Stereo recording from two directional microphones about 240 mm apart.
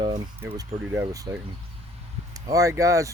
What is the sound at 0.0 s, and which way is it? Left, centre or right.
Speech, centre.